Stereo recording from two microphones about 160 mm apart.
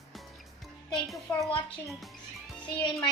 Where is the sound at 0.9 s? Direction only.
Centre (ahead or behind).